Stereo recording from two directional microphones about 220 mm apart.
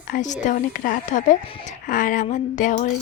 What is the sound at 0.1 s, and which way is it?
Speech, 35° left (ahead or behind).